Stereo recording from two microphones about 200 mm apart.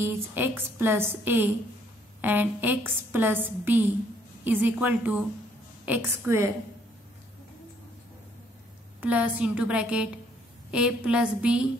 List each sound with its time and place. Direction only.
0.0 s a woman's voice: 10° right (ahead or behind)
9.0 s a woman's voice: 10° right (ahead or behind)